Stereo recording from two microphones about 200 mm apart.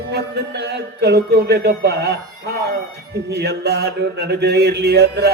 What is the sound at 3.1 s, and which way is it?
Mantra, 55° right (ahead or behind).